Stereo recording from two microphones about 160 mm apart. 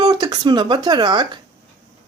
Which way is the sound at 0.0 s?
25° right (ahead or behind).